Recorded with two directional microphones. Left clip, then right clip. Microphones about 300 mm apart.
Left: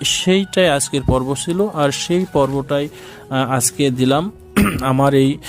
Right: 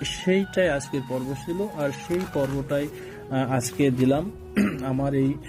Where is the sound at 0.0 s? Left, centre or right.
Left.